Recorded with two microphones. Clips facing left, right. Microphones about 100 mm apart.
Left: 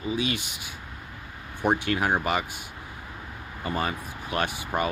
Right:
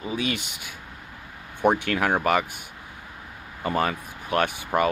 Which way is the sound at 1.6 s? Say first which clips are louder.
Right 3 dB; 55° right (ahead or behind).